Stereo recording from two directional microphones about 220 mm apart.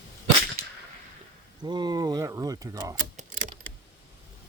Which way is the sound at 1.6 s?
20° right (ahead or behind).